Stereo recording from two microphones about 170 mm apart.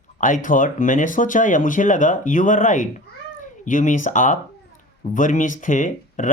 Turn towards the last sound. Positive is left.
turn(degrees=50)  # may be behind; listen again after turning